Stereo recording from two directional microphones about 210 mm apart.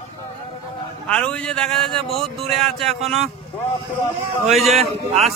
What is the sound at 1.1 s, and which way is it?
A man's voice, 5° left (ahead or behind).